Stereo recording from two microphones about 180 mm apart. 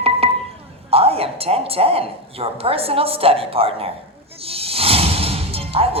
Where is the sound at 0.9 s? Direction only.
35° right (ahead or behind).